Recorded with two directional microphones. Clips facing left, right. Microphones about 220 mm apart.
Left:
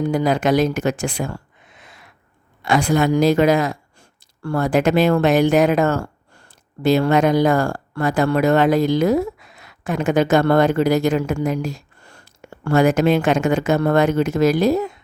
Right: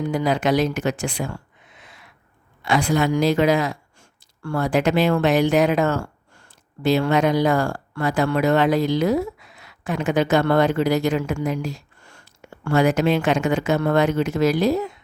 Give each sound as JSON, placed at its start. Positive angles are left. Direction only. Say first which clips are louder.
{"t": 0.0, "sound": "speech", "louder": "left 3 dB", "side_deg": 45}